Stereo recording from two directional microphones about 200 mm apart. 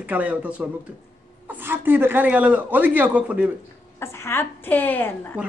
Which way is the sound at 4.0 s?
15° left (ahead or behind).